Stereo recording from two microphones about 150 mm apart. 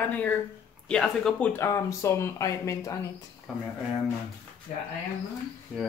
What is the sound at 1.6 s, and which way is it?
Speech, 20° left (ahead or behind).